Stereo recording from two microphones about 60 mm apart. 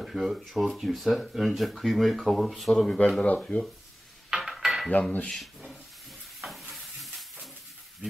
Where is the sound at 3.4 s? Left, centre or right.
Centre.